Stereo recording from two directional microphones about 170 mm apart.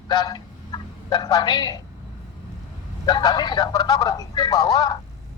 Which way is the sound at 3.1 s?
25° left (ahead or behind).